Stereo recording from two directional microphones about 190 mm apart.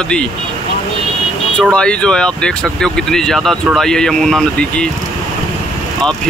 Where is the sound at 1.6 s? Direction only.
5° left (ahead or behind).